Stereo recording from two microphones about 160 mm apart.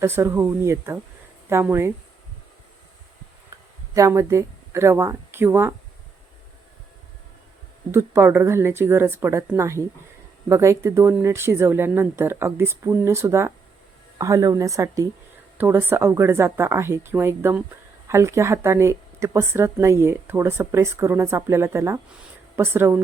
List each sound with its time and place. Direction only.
0.0 s speech: 15° right (ahead or behind)
3.9 s speech: 20° right (ahead or behind)
7.9 s speech: 15° right (ahead or behind)